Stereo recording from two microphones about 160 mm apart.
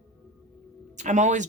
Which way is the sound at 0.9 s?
50° right (ahead or behind).